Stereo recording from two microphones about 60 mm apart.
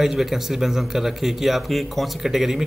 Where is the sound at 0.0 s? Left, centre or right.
Centre.